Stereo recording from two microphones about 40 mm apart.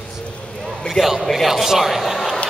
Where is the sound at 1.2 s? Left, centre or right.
Centre.